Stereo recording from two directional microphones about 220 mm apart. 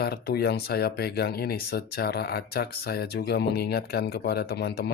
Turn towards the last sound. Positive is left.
turn(degrees=45)  # may be behind; listen again after turning